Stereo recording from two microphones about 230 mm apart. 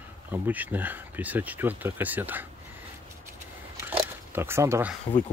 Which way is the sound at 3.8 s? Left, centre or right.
Centre.